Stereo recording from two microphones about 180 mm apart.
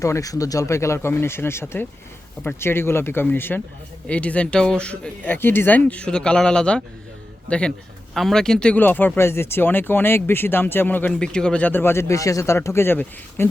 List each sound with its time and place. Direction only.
0.0 s speech: 20° left (ahead or behind)
8.1 s speech: centre (ahead or behind)